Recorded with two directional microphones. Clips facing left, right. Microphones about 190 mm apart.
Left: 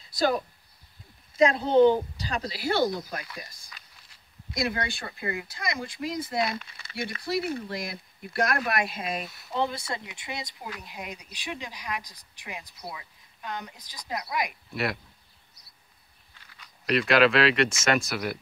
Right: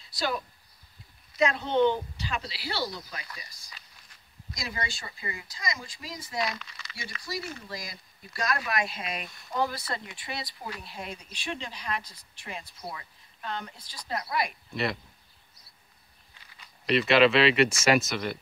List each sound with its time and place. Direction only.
1.4 s a woman's voice: 35° left (ahead or behind); by 9.2 s 50° left (ahead or behind)
9.6 s speech: 25° left (ahead or behind)
14.7 s speech: 5° left (ahead or behind)
16.8 s speech: centre (ahead or behind)
18.1 s speech: 5° left (ahead or behind)